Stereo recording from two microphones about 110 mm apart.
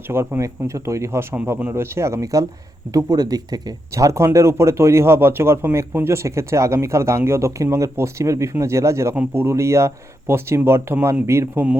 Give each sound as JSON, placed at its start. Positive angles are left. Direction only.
{"t": 0.1, "sound": "speech", "side_deg": -20}
{"t": 1.4, "sound": "speech", "side_deg": -10}
{"t": 1.7, "sound": "speech", "side_deg": -25}